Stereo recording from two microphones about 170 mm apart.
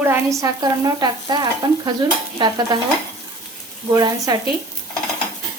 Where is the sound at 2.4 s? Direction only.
25° right (ahead or behind).